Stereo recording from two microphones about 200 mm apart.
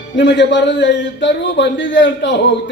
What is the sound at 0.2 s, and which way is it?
A man's voice, 60° left (ahead or behind).